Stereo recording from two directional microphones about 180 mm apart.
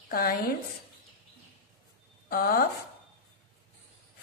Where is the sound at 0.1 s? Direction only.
55° left (ahead or behind).